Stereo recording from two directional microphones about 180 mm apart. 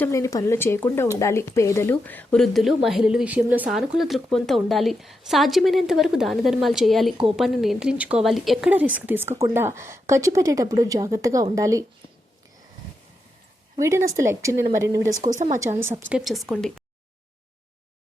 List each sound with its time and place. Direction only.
0.0 s speech: 15° left (ahead or behind); by 11.9 s 15° right (ahead or behind)
13.7 s speech: 15° right (ahead or behind)
15.2 s speech: 45° right (ahead or behind)
15.9 s speech: 10° right (ahead or behind)